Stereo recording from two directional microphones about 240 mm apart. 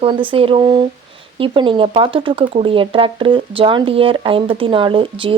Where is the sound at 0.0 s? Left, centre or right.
Right.